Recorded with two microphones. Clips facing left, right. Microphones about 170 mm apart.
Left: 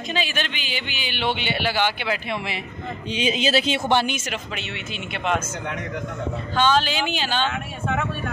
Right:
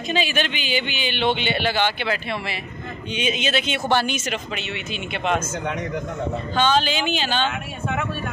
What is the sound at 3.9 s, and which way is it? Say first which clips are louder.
Speech: right 1 dB; 20° left (ahead or behind).